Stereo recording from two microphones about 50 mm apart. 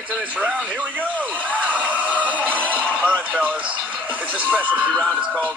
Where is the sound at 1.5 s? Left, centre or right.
Right.